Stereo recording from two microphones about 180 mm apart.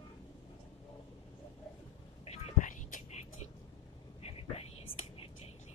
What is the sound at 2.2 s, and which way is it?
Whispering, 40° left (ahead or behind).